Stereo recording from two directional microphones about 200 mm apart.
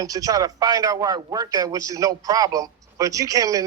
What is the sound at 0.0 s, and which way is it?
A man's voice, 20° right (ahead or behind).